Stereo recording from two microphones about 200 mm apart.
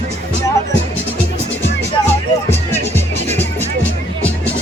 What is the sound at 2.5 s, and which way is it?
Music, 10° left (ahead or behind).